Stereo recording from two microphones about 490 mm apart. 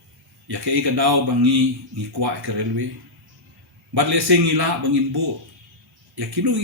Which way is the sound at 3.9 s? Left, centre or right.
Right.